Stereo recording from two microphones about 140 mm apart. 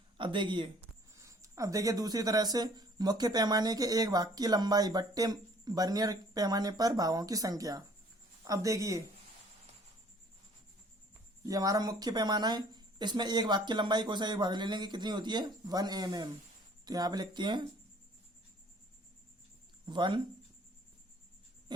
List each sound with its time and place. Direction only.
0.2 s speech: 35° right (ahead or behind)
1.1 s speech: 20° right (ahead or behind)
11.4 s speech: 25° right (ahead or behind)
19.8 s speech: 35° right (ahead or behind)